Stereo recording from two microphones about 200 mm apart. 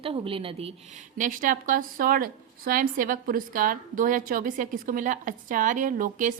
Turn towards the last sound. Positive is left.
turn(degrees=-40)  # may be behind; listen again after turning